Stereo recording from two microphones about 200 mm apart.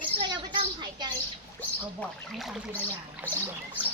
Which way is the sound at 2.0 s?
Centre (ahead or behind).